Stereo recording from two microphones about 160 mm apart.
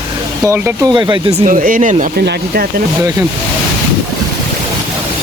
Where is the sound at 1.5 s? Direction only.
60° right (ahead or behind).